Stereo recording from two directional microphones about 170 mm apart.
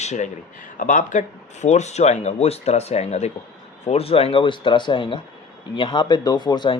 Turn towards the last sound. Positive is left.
turn(degrees=25)  # may be behind; listen again after turning